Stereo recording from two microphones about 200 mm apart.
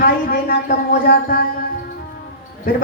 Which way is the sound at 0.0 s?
45° left (ahead or behind).